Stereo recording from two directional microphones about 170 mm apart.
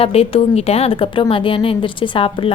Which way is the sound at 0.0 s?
35° left (ahead or behind).